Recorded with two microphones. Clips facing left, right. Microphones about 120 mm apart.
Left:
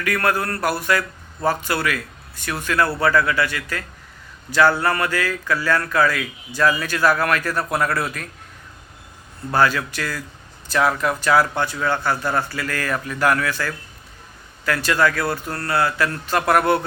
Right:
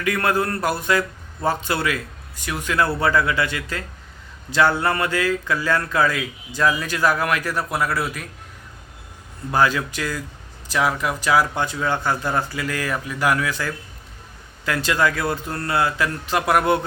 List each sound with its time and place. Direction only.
0.0 s speech: 20° right (ahead or behind)
9.5 s speech: 15° right (ahead or behind)